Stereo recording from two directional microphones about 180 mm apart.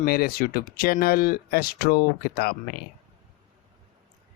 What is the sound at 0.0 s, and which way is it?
Speech, 55° left (ahead or behind).